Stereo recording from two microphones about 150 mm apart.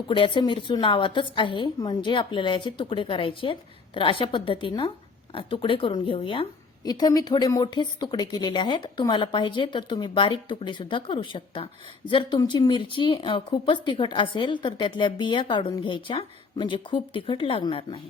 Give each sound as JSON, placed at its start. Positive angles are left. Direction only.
{"t": 0.1, "sound": "a woman's voice", "side_deg": 30}